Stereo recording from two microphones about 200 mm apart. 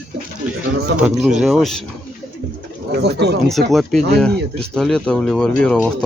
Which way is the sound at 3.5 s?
Centre (ahead or behind).